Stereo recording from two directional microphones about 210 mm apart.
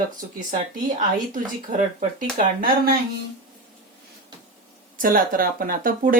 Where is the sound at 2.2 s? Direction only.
45° right (ahead or behind).